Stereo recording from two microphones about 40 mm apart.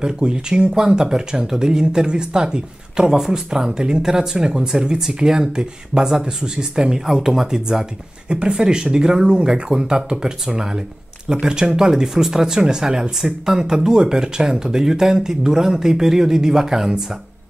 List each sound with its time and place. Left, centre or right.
0.0 s speech: right
13.6 s speech: right